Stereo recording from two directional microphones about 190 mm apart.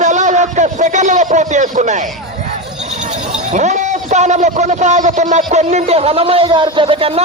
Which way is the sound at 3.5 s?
40° right (ahead or behind).